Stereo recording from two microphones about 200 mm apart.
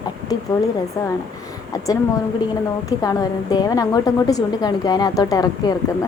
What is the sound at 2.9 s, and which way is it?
A woman's voice, 15° left (ahead or behind).